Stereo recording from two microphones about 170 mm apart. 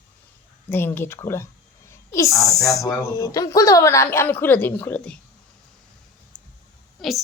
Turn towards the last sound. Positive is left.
turn(degrees=0)  # may be behind; listen again after turning